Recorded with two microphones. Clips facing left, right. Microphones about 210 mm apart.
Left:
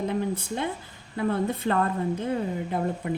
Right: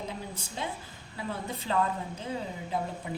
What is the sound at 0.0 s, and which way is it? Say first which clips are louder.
A woman's voice: left 11 dB; 60° left (ahead or behind).